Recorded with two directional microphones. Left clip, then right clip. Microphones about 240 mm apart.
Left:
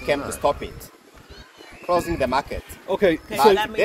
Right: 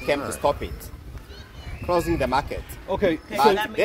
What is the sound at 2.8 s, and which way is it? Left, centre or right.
Speech, left.